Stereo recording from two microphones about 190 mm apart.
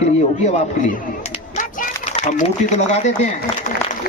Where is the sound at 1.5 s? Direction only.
40° left (ahead or behind).